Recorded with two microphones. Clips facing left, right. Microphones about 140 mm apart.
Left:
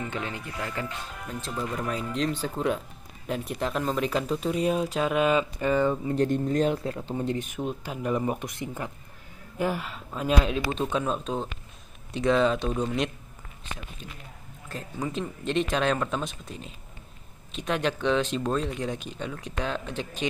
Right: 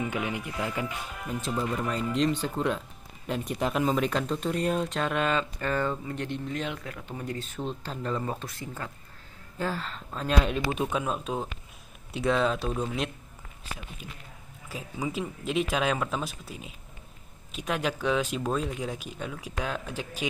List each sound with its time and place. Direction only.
0.0 s speech: 10° right (ahead or behind); by 5.9 s 15° left (ahead or behind)
6.0 s speech: 40° left (ahead or behind)
7.4 s speech: 15° left (ahead or behind)
10.7 s speech: 5° right (ahead or behind)
14.7 s speech: 10° right (ahead or behind)